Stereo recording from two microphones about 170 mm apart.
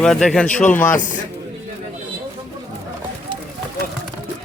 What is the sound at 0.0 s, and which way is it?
Speech, 5° left (ahead or behind).